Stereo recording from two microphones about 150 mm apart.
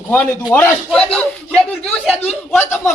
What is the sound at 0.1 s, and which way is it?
Speech, 15° left (ahead or behind).